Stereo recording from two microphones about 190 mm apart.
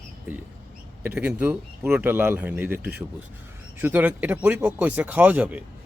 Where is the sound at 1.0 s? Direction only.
5° right (ahead or behind).